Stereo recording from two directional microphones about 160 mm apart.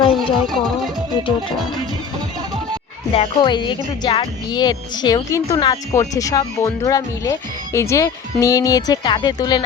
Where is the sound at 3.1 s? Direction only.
30° left (ahead or behind).